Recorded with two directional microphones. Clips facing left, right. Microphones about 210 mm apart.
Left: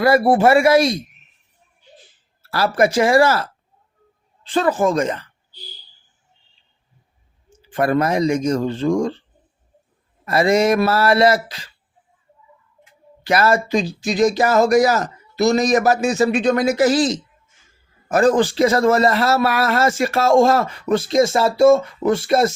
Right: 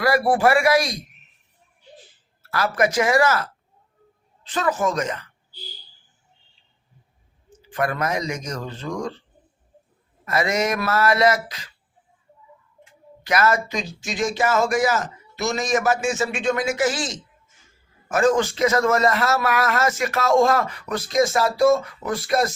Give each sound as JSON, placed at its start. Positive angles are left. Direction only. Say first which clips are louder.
{"t": 0.0, "sound": "speech", "louder": "left 5 dB", "side_deg": 25}
{"t": 2.4, "sound": "speech", "louder": "left 4 dB", "side_deg": 30}
{"t": 4.4, "sound": "speech", "louder": "left 5 dB", "side_deg": 30}
{"t": 7.7, "sound": "speech", "louder": "left 6 dB", "side_deg": 30}
{"t": 10.2, "sound": "speech", "louder": "left 7 dB", "side_deg": 30}
{"t": 13.2, "sound": "speech", "louder": "left 4 dB", "side_deg": 30}